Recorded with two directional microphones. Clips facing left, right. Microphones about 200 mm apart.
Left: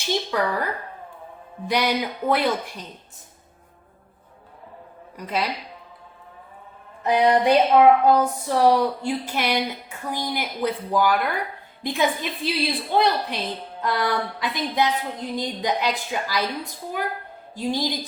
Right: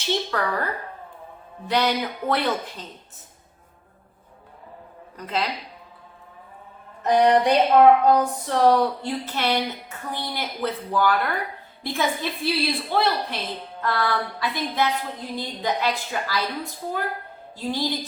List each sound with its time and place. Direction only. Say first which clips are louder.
0.3 s a woman's voice: left 2 dB; 10° left (ahead or behind)
5.1 s a woman's voice: left 1 dB; 10° left (ahead or behind)
7.0 s a woman's voice: right 1 dB; 10° left (ahead or behind)